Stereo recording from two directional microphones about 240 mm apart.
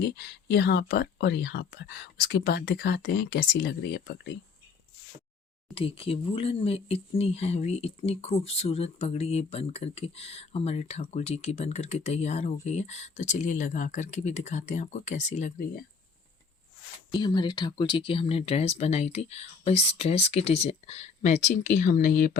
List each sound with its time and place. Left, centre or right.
0.2 s speech: left
5.7 s speech: left
17.1 s speech: centre; by 22.4 s left